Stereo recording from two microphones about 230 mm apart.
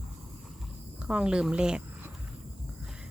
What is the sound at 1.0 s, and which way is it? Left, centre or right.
Speech, centre.